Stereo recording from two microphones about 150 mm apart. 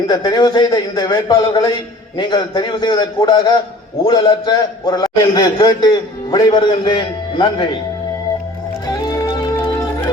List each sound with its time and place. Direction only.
0.1 s a man's voice: 30° left (ahead or behind)
8.9 s music: 25° left (ahead or behind)